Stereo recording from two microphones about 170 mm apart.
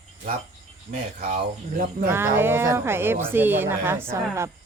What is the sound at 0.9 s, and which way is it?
Speech, 55° right (ahead or behind).